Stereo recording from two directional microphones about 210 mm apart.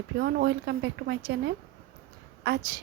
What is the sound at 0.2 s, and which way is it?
A woman's voice, 55° right (ahead or behind).